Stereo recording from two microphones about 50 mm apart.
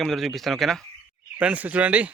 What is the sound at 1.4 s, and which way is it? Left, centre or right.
Speech, right.